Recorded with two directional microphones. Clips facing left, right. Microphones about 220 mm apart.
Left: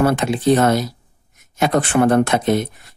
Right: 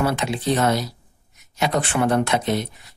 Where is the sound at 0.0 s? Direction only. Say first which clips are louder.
Left 6 dB; 50° left (ahead or behind).